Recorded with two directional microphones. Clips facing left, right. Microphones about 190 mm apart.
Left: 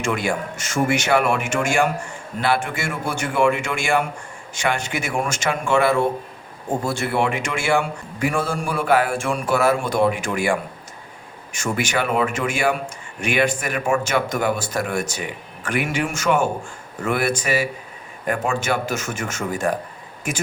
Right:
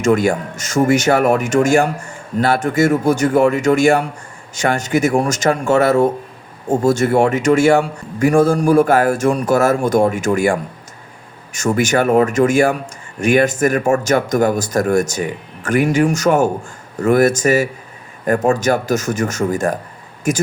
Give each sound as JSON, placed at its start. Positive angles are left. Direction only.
{"t": 0.0, "sound": "a man's voice", "side_deg": -40}